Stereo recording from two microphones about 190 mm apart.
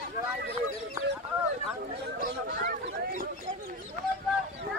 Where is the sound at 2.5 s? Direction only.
50° right (ahead or behind).